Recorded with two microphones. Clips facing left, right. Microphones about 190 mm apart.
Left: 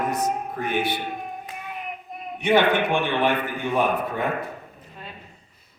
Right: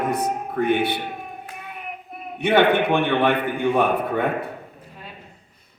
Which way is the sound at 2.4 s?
60° right (ahead or behind).